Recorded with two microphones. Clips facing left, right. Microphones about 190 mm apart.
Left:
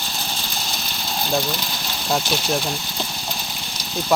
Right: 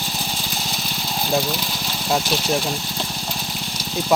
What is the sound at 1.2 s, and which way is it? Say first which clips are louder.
Speech: right 1 dB; 5° right (ahead or behind).